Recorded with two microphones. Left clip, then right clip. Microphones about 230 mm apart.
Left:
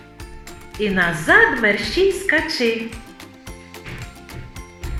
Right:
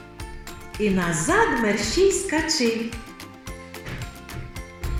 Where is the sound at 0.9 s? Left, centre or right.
Left.